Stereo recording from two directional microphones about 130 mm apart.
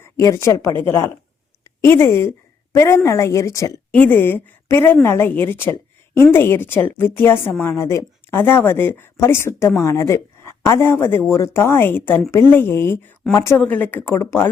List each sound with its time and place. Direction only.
0.0 s speech: 25° left (ahead or behind)
3.9 s a woman's voice: 10° left (ahead or behind)